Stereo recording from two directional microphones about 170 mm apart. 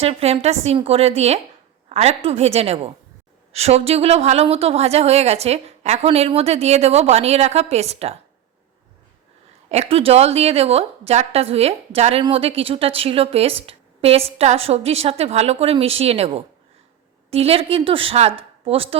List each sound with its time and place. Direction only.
0.0 s a woman's voice: 35° right (ahead or behind)
9.6 s a woman's voice: 40° right (ahead or behind)